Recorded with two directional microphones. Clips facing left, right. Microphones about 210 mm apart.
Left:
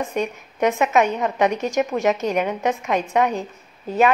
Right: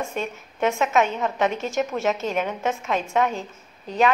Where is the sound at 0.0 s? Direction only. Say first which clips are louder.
Left 4 dB; 15° left (ahead or behind).